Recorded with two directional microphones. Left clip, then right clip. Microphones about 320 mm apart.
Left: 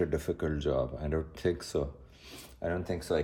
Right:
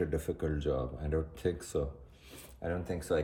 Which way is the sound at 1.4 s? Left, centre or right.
Centre.